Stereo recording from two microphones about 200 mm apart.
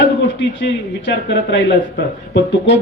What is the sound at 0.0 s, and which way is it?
Speech, 60° left (ahead or behind).